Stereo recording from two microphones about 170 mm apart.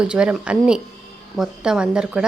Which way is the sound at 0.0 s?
5° right (ahead or behind).